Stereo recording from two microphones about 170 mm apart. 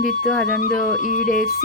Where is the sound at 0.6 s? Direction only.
50° left (ahead or behind).